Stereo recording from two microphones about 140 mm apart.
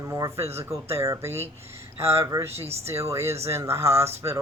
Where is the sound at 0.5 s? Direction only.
20° right (ahead or behind).